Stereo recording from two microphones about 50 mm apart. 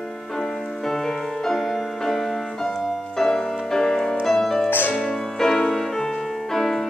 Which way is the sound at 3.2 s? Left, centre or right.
Centre.